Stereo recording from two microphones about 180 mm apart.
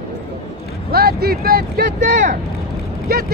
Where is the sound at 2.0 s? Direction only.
45° right (ahead or behind).